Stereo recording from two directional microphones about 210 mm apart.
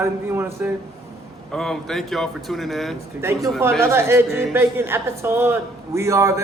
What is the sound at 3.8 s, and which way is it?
A woman's voice, 10° right (ahead or behind).